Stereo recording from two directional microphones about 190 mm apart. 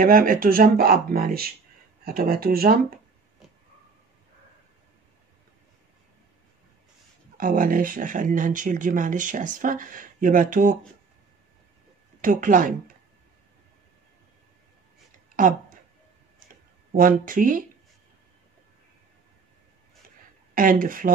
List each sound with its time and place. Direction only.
0.0 s speech: 45° right (ahead or behind)
7.3 s speech: 45° right (ahead or behind)
12.2 s speech: 45° right (ahead or behind)
15.4 s speech: 45° right (ahead or behind)
16.9 s speech: 45° right (ahead or behind)
20.5 s speech: 45° right (ahead or behind)